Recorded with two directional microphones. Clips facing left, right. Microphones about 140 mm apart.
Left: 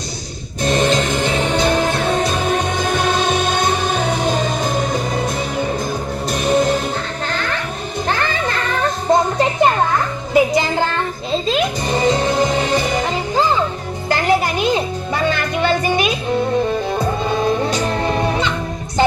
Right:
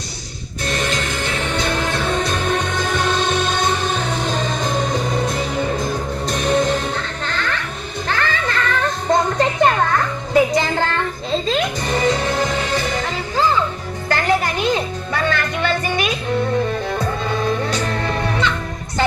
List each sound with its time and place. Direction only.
0.6 s music: 20° left (ahead or behind)
2.1 s music: 5° left (ahead or behind)